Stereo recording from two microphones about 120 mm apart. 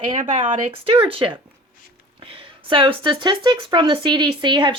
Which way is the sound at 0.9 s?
50° right (ahead or behind).